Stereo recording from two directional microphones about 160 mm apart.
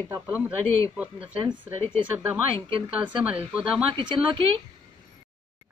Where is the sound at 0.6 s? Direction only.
15° left (ahead or behind).